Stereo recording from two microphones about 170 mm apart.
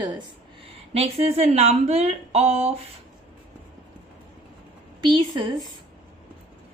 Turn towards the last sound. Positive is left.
turn(degrees=-30)  # may be behind; listen again after turning